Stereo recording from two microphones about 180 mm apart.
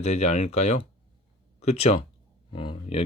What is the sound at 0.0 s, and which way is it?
Speech, 40° left (ahead or behind).